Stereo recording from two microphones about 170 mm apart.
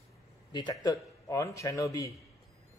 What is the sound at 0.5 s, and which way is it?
A man's voice, 25° left (ahead or behind).